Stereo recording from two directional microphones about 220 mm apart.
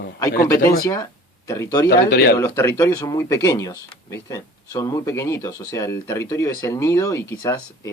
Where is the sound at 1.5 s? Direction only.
15° left (ahead or behind).